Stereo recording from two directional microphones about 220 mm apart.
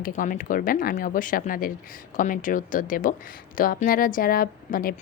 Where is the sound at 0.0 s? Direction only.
40° left (ahead or behind).